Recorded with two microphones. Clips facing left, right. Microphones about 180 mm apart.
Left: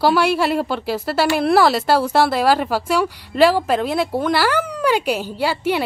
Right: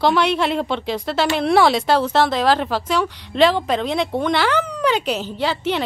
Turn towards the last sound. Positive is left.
turn(degrees=10)  # may be behind; listen again after turning